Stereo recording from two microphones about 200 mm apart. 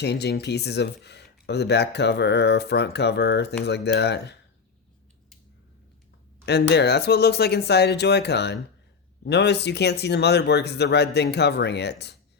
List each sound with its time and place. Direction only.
0.0 s speech: 55° left (ahead or behind)
6.4 s speech: 55° left (ahead or behind)